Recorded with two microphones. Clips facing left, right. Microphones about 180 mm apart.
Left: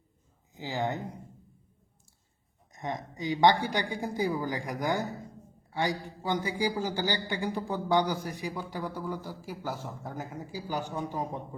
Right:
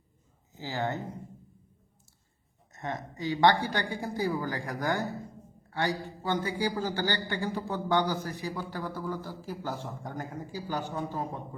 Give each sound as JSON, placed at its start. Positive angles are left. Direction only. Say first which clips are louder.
{"t": 0.5, "sound": "a man's voice", "louder": "left 1 dB", "side_deg": 15}
{"t": 2.7, "sound": "a man's voice", "louder": "left 1 dB", "side_deg": 15}